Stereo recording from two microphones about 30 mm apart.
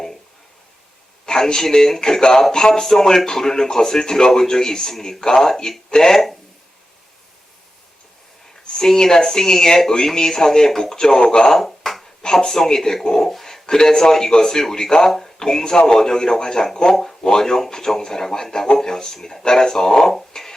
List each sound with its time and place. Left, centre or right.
1.2 s a man's voice: left
8.6 s speech: centre
11.2 s speech: left
11.4 s a sound: centre
12.2 s a sound: left
12.5 s speech: centre
20.3 s music: centre